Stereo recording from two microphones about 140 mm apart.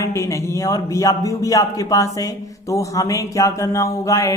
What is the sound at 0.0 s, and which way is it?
A man's voice, 20° left (ahead or behind).